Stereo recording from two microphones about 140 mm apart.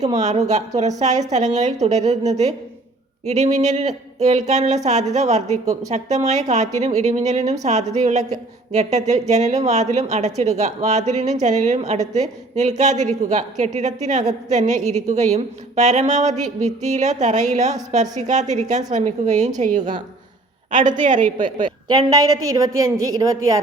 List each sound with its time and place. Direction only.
0.2 s a woman's voice: 55° right (ahead or behind)
21.8 s a woman's voice: 30° right (ahead or behind)